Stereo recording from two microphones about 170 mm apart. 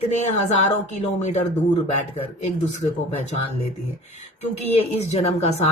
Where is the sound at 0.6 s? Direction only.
45° left (ahead or behind).